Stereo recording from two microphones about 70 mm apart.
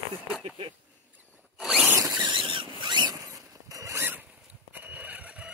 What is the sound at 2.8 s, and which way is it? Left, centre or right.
Zipper, right.